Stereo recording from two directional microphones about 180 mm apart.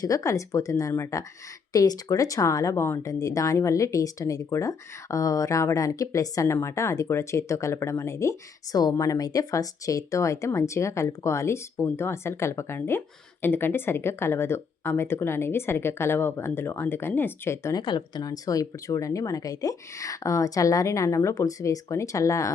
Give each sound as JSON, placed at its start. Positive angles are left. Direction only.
{"t": 0.0, "sound": "speech", "side_deg": 20}